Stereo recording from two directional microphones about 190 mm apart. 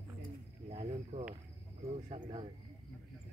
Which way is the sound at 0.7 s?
30° right (ahead or behind).